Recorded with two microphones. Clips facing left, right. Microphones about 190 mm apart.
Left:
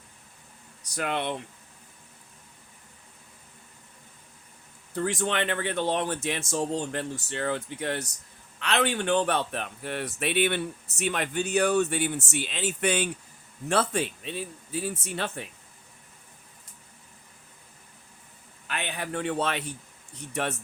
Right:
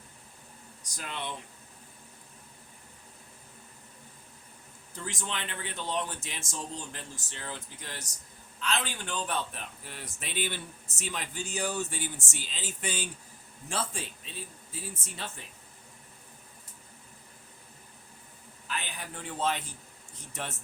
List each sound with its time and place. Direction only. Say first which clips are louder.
0.9 s speech: left 10 dB; 65° left (ahead or behind)
4.9 s a man's voice: left 11 dB; 60° left (ahead or behind)
18.7 s a man's voice: left 7 dB; 65° left (ahead or behind)